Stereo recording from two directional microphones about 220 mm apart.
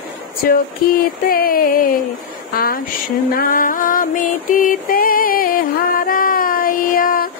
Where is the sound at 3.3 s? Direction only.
40° left (ahead or behind).